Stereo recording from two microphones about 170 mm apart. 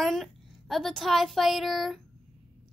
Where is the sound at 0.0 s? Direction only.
Centre (ahead or behind).